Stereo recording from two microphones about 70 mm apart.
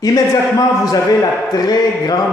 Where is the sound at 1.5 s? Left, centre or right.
Left.